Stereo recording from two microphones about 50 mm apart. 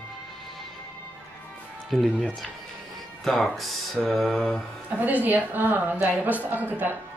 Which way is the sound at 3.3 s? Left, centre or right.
Centre.